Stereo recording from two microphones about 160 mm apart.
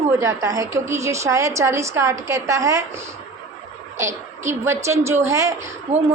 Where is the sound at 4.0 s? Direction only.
15° right (ahead or behind).